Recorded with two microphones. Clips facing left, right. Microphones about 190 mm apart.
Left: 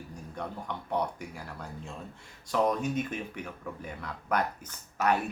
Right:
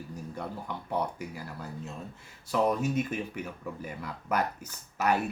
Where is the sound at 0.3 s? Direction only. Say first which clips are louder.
Left 2 dB; 5° right (ahead or behind).